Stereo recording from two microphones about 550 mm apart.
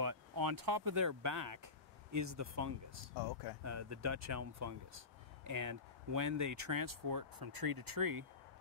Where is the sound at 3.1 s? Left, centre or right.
Left.